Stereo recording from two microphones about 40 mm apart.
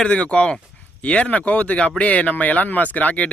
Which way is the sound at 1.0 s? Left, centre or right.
Left.